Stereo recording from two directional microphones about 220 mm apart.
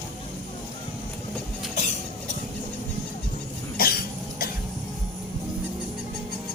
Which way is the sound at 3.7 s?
45° left (ahead or behind).